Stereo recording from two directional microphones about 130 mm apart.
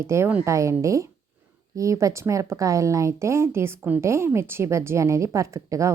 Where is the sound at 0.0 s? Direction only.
20° right (ahead or behind).